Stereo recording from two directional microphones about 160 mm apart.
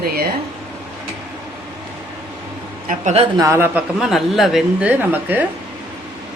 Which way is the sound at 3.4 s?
15° right (ahead or behind).